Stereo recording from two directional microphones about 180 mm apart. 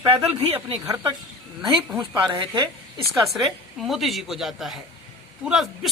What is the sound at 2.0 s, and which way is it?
Speech, 30° right (ahead or behind).